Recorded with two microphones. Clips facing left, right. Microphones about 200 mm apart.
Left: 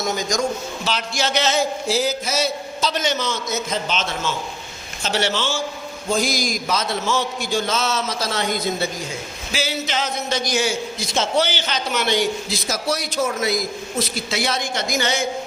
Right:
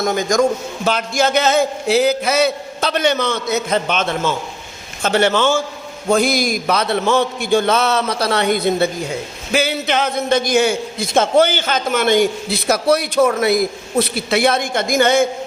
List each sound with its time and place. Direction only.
0.0 s a man's voice: 55° right (ahead or behind)